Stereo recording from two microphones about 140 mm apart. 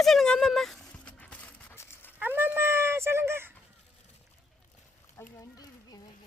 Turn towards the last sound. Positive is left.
turn(degrees=20)  # may be behind; listen again after turning